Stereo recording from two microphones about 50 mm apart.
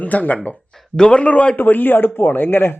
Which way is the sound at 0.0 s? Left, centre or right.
Left.